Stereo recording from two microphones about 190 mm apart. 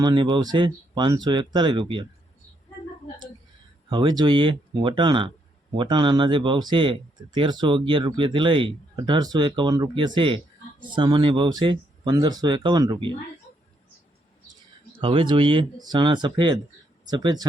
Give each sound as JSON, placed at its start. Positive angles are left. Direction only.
{"t": 0.0, "sound": "speech", "side_deg": -25}
{"t": 3.8, "sound": "speech", "side_deg": -25}
{"t": 14.9, "sound": "speech", "side_deg": -25}